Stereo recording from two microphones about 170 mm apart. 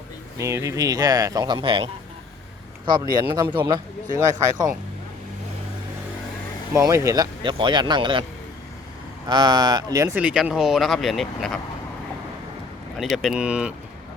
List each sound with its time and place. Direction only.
0.3 s speech: 20° right (ahead or behind)
3.4 s speech: 10° right (ahead or behind)
6.7 s speech: 15° right (ahead or behind)
9.3 s speech: 25° right (ahead or behind)
10.2 s speech: 5° right (ahead or behind)
13.0 s speech: centre (ahead or behind)